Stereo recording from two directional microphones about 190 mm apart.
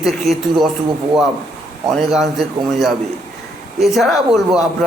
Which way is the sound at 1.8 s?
Centre (ahead or behind).